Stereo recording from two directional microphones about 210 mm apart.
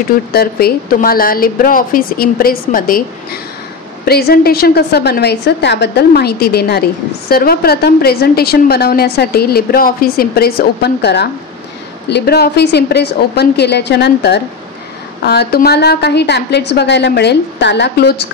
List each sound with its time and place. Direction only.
0.3 s a woman's voice: 45° left (ahead or behind)
4.0 s a woman's voice: 50° left (ahead or behind)